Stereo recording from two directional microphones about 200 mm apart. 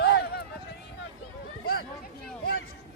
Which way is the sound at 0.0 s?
55° left (ahead or behind).